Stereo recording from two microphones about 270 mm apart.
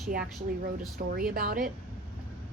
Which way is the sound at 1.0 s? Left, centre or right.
Right.